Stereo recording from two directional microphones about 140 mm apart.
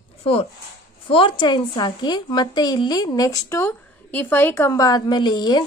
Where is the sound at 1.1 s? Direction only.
40° left (ahead or behind).